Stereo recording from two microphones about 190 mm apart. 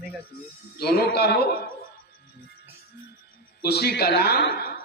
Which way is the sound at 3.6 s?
55° left (ahead or behind).